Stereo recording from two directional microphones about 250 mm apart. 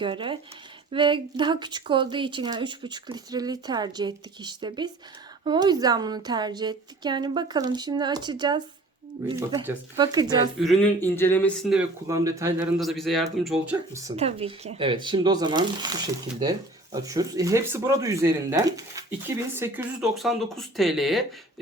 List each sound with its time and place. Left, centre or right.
0.0 s speech: centre
10.6 s speech: centre
12.0 s speech: centre
14.2 s speech: right; by 21.2 s centre